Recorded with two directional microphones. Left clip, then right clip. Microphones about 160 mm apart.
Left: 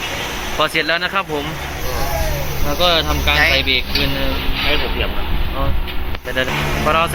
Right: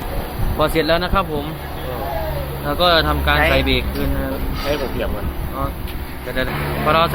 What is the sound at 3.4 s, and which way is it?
Speech, 55° right (ahead or behind).